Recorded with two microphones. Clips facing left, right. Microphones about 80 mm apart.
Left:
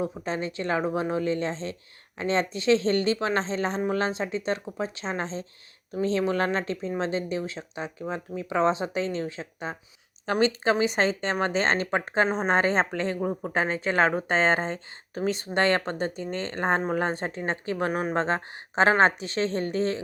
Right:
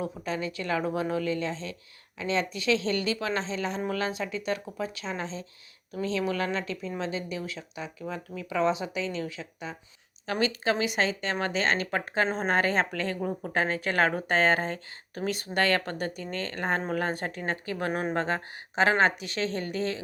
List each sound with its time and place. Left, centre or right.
0.0 s speech: left